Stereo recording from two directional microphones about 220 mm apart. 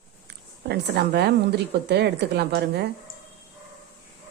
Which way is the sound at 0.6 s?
50° right (ahead or behind).